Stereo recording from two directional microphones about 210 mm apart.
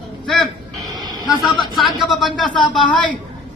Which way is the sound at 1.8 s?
Centre (ahead or behind).